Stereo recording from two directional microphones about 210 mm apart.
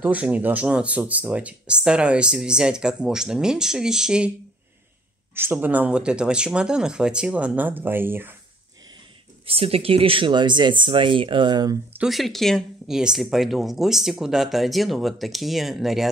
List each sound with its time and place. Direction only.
0.0 s speech: 5° right (ahead or behind)
5.3 s speech: 10° right (ahead or behind)
9.5 s speech: 25° right (ahead or behind)
12.0 s speech: centre (ahead or behind)